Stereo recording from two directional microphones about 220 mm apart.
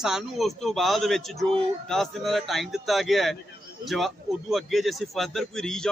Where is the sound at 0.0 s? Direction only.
Centre (ahead or behind).